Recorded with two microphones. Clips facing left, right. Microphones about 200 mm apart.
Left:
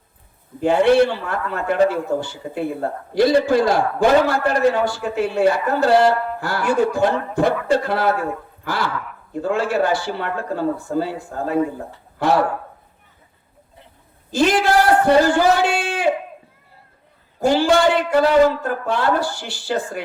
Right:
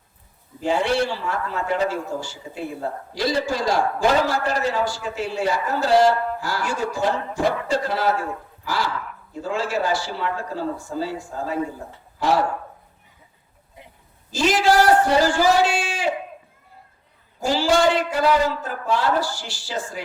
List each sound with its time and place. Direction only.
0.6 s a man's voice: 55° left (ahead or behind)
14.3 s a man's voice: 55° left (ahead or behind)
17.4 s a man's voice: 60° left (ahead or behind)